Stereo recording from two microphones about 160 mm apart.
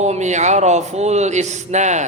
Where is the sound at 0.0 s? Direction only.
45° right (ahead or behind).